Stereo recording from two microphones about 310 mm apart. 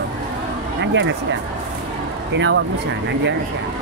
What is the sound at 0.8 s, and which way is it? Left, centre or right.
Speech, right.